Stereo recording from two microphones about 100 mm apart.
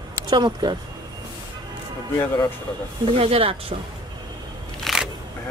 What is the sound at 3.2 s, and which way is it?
Speech, 80° right.